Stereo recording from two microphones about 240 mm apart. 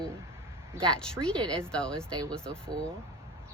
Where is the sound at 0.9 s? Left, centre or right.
Centre.